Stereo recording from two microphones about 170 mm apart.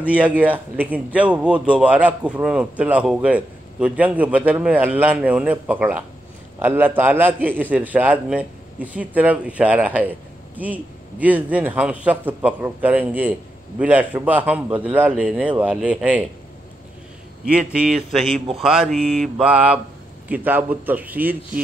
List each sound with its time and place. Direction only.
0.0 s speech: 10° right (ahead or behind)
17.5 s speech: 5° right (ahead or behind)